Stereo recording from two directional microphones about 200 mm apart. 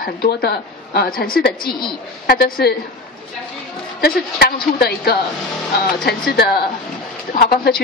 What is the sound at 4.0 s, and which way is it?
A woman's voice, 50° left (ahead or behind).